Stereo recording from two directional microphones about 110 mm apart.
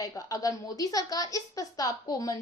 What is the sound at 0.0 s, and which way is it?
A woman's voice, 30° left (ahead or behind).